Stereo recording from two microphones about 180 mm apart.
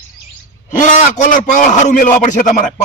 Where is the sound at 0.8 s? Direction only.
45° left (ahead or behind).